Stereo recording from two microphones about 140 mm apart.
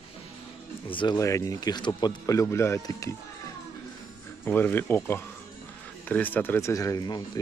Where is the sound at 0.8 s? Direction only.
35° left (ahead or behind).